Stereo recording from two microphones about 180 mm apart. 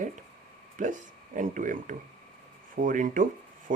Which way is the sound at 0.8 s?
45° right (ahead or behind).